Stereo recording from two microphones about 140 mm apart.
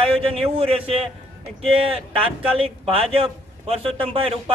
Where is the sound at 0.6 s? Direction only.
45° right (ahead or behind).